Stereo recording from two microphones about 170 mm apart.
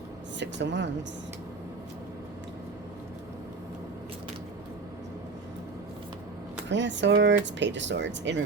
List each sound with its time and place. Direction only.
0.3 s speech: 90° right
6.7 s speech: 90° right